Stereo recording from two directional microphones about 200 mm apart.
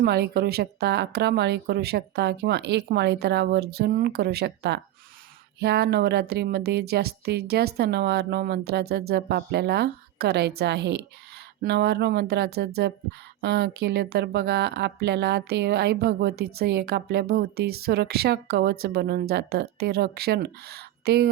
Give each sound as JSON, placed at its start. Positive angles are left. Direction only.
{"t": 0.0, "sound": "speech", "side_deg": -55}